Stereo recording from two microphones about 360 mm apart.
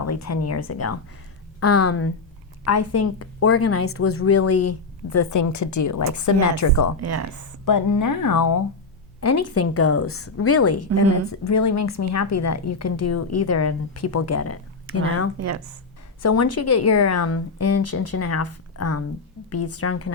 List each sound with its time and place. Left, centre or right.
0.0 s a woman's voice: left
7.0 s speech: right
7.6 s speech: left
9.2 s a woman's voice: left
15.4 s speech: right
16.2 s a woman's voice: left